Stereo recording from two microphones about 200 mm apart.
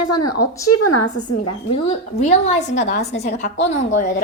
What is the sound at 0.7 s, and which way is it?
Speech, 90° left.